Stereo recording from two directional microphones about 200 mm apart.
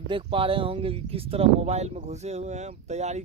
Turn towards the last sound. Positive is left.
turn(degrees=-35)  # may be behind; listen again after turning